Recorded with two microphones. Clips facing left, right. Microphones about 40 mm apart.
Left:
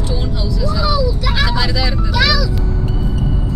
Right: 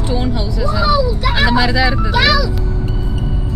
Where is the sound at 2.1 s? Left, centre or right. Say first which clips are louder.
Even; right.